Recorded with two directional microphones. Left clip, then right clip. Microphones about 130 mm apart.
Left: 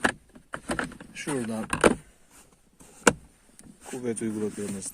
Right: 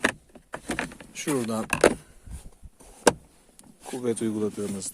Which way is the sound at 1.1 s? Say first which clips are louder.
Right 4 dB; 30° right (ahead or behind).